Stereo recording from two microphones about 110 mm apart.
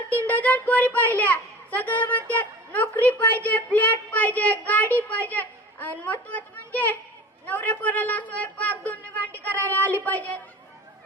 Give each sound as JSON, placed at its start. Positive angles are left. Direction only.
{"t": 0.1, "sound": "a child's voice", "side_deg": 15}